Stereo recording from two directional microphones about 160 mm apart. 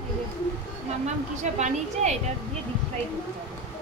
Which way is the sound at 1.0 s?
45° right (ahead or behind).